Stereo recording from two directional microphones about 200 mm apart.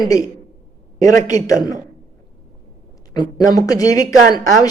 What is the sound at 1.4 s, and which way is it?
Speech, 15° left (ahead or behind).